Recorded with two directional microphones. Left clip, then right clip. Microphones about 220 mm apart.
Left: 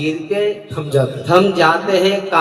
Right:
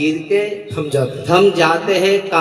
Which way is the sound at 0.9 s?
40° right (ahead or behind).